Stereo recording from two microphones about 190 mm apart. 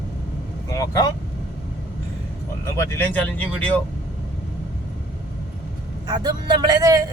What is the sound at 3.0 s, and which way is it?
Speech, 10° left (ahead or behind).